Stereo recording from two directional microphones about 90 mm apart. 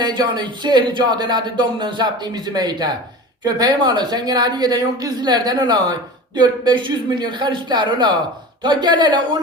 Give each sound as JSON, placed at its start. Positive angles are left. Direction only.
{"t": 0.0, "sound": "speech", "side_deg": -55}